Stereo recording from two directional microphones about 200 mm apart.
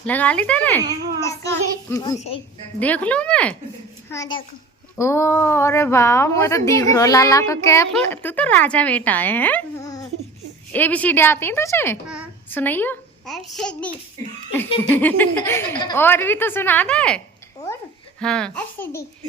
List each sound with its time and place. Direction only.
0.0 s a woman's voice: 5° left (ahead or behind)
2.1 s speech: 35° left (ahead or behind)
2.7 s a woman's voice: 5° left (ahead or behind)
4.1 s a child's voice: 20° left (ahead or behind)
12.0 s a sound: 5° right (ahead or behind)
12.5 s a woman's voice: 10° left (ahead or behind)
18.2 s a child's voice: 5° left (ahead or behind)